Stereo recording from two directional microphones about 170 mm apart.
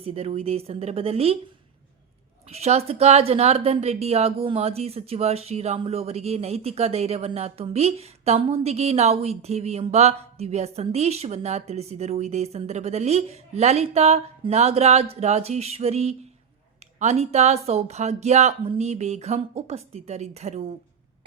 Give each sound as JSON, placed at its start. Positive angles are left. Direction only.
{"t": 0.0, "sound": "a woman's voice", "side_deg": -35}
{"t": 2.5, "sound": "a woman's voice", "side_deg": -40}